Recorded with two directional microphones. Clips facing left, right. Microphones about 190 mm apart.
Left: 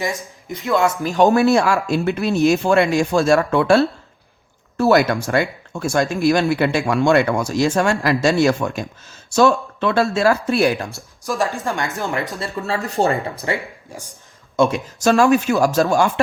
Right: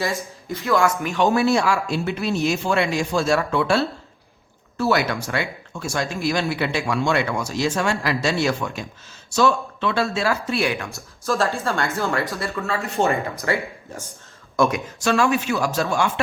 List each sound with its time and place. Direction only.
0.4 s speech: 20° left (ahead or behind)
1.0 s speech: 40° left (ahead or behind)
4.8 s speech: 45° left (ahead or behind)
11.2 s speech: 15° left (ahead or behind)
12.5 s speech: 35° left (ahead or behind)
13.4 s speech: 15° left (ahead or behind)
14.9 s speech: 45° left (ahead or behind)